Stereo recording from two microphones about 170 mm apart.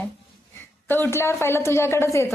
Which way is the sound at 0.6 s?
10° left (ahead or behind).